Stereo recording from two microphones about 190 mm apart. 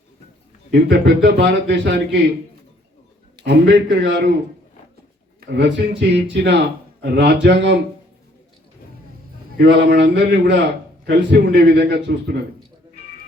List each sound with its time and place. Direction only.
0.7 s a man's voice: 65° right (ahead or behind)
3.4 s a man's voice: 65° right (ahead or behind)
5.5 s a man's voice: 70° right (ahead or behind)
9.6 s a man's voice: 65° right (ahead or behind)